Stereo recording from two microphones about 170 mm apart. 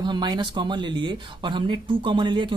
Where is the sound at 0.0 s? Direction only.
25° right (ahead or behind).